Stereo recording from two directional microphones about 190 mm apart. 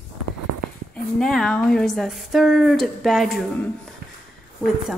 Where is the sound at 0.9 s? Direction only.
5° left (ahead or behind).